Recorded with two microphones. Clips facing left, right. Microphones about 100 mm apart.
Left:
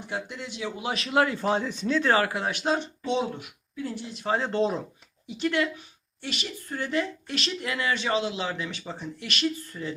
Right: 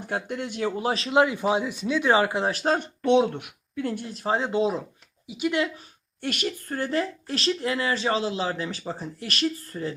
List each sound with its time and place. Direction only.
0.3 s speech: 50° right (ahead or behind); by 1.2 s 30° right (ahead or behind)
1.2 s speech: 15° right (ahead or behind); by 4.0 s 70° right (ahead or behind)
4.0 s a woman's voice: 40° right (ahead or behind)
4.4 s speech: 5° right (ahead or behind)
6.2 s a woman's voice: 50° right (ahead or behind)